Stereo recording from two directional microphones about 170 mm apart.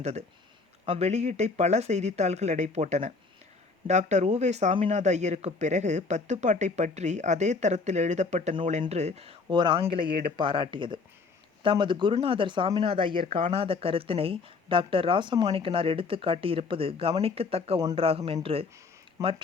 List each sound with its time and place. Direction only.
0.0 s speech: 40° right (ahead or behind)
19.2 s speech: 20° right (ahead or behind)